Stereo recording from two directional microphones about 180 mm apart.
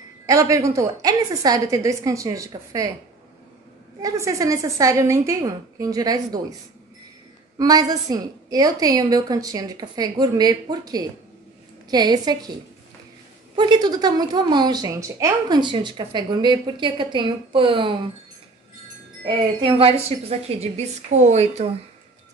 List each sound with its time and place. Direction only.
0.3 s a woman's voice: 15° right (ahead or behind)
4.0 s a woman's voice: 20° right (ahead or behind)
7.5 s a woman's voice: 20° right (ahead or behind)
13.6 s a woman's voice: 25° right (ahead or behind)
19.6 s a woman's voice: 35° right (ahead or behind)